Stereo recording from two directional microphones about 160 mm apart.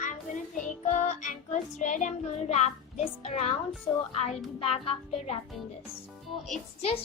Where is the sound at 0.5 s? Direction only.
50° left (ahead or behind).